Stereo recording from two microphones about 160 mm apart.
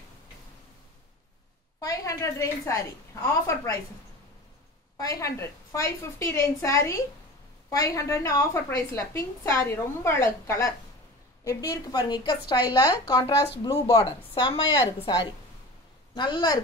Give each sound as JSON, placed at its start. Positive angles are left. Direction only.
{"t": 1.8, "sound": "a woman's voice", "side_deg": 20}
{"t": 4.9, "sound": "a woman's voice", "side_deg": 20}
{"t": 14.3, "sound": "a woman's voice", "side_deg": 30}